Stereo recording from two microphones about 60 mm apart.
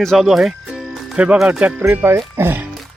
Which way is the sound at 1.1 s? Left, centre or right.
Centre.